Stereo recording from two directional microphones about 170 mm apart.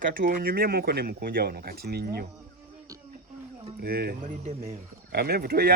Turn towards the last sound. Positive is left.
turn(degrees=-65)  # may be behind; listen again after turning